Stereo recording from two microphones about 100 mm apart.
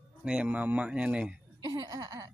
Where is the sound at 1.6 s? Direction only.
40° right (ahead or behind).